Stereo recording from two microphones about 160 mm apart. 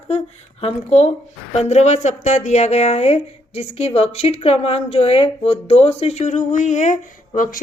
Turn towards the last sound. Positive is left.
turn(degrees=55)  # may be behind; listen again after turning